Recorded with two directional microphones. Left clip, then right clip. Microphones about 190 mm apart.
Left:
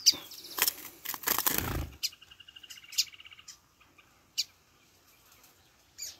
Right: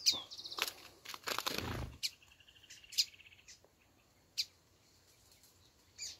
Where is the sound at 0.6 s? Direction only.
70° left (ahead or behind).